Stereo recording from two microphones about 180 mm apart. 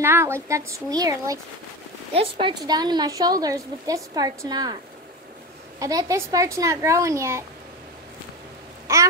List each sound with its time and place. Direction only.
0.0 s a woman's voice: 15° right (ahead or behind)
2.1 s a woman's voice: 30° right (ahead or behind)
5.8 s speech: 20° right (ahead or behind)
8.9 s speech: 15° right (ahead or behind)